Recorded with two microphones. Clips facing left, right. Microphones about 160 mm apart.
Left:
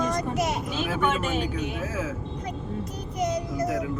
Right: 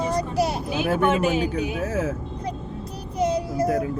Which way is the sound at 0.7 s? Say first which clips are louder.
Right 5 dB; 10° right (ahead or behind).